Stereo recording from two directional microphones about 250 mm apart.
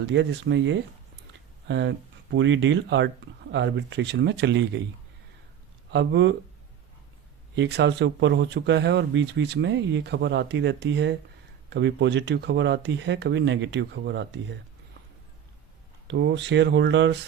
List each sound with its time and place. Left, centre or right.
0.0 s speech: right
5.9 s speech: right
7.5 s speech: right
16.0 s speech: right